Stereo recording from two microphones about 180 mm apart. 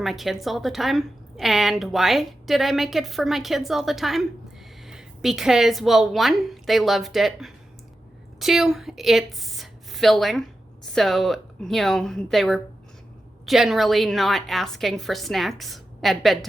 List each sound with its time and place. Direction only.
0.0 s a woman's voice: centre (ahead or behind)